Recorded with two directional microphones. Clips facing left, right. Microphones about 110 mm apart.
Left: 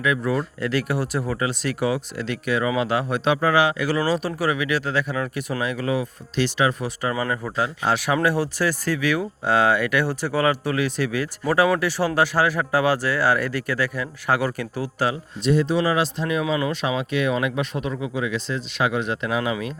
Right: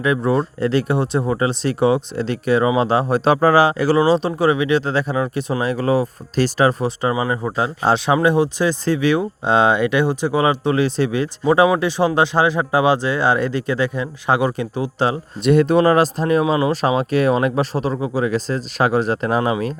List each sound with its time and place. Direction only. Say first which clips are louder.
0.0 s speech: right 5 dB; 30° right (ahead or behind)
7.1 s speech: right 3 dB; 15° right (ahead or behind)
7.4 s speech: right 5 dB; 30° right (ahead or behind)
15.4 s speech: right 6 dB; 55° right (ahead or behind); by 19.7 s 40° right (ahead or behind)